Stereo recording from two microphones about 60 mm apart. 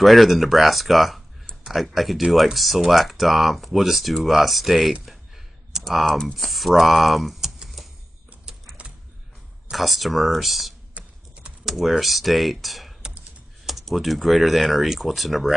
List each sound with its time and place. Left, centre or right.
0.0 s speech: centre
5.0 s clicking: centre
5.9 s speech: centre
9.7 s speech: centre
11.0 s typing: right
11.6 s speech: centre